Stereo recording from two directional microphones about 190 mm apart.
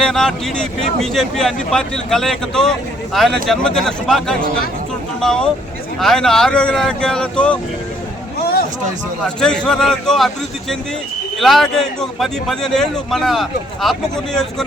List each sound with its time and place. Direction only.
0.0 s speech: centre (ahead or behind)
8.4 s a sound: 55° left (ahead or behind)
9.4 s speech: 5° left (ahead or behind)